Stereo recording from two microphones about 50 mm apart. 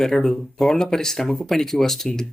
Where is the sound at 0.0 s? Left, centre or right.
Centre.